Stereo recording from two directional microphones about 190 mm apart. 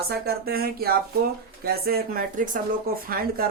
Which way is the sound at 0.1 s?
55° right (ahead or behind).